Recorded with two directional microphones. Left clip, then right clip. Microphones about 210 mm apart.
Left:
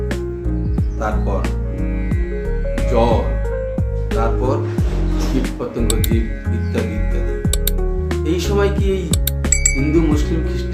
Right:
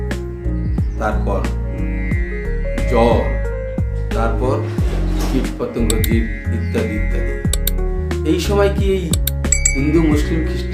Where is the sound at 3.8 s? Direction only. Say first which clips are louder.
Left 1 dB; centre (ahead or behind).